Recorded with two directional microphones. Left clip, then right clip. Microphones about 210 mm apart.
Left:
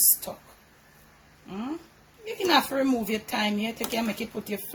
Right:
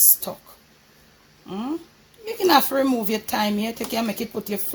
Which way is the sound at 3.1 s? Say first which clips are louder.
Right 4 dB; 40° right (ahead or behind).